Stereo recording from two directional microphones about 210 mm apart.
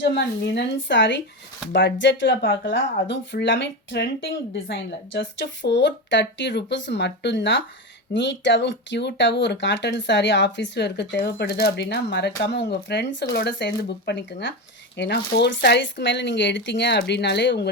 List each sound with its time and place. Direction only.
0.0 s speech: 55° left (ahead or behind)